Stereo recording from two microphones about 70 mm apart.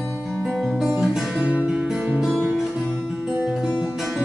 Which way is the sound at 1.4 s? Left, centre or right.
Right.